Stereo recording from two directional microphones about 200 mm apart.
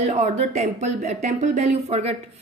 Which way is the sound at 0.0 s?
35° right (ahead or behind).